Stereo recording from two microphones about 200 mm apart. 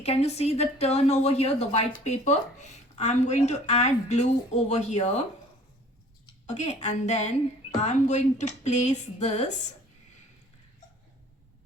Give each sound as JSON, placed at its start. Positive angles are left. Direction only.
{"t": 0.0, "sound": "speech", "side_deg": 30}
{"t": 6.5, "sound": "speech", "side_deg": 35}